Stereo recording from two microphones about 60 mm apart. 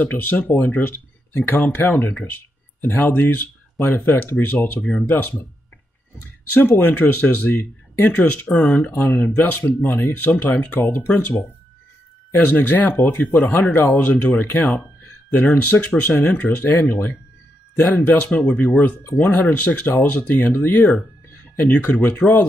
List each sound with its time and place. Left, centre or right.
0.0 s speech: left
6.6 s speech: left
8.9 s speech: left